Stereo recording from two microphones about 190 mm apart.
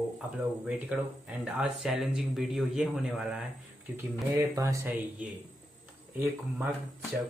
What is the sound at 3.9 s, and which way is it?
Speech, 15° right (ahead or behind).